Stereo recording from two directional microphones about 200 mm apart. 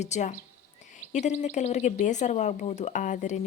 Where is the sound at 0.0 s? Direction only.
35° left (ahead or behind).